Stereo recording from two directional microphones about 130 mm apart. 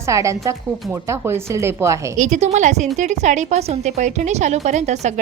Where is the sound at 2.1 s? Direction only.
65° right (ahead or behind).